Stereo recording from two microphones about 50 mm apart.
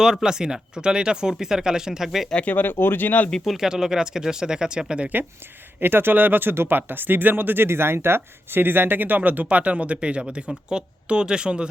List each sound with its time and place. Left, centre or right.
0.0 s speech: centre
2.3 s speech: left
3.4 s speech: centre
3.7 s speech: centre
5.8 s speech: right
6.5 s speech: right
6.7 s speech: right; by 11.7 s centre